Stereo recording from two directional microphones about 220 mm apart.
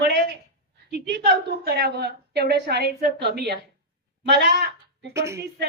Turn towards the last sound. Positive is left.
turn(degrees=-15)  # may be behind; listen again after turning